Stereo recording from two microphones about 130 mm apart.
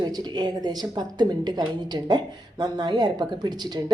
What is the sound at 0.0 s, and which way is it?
Speech, 30° right (ahead or behind).